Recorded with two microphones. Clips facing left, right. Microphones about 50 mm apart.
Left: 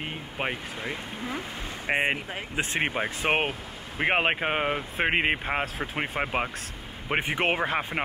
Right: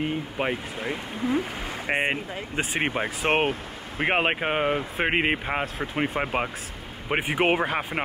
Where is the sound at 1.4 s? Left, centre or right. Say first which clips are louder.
Right 6 dB; right.